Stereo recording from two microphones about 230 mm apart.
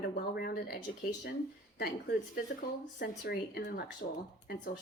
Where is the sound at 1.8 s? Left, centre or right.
Left.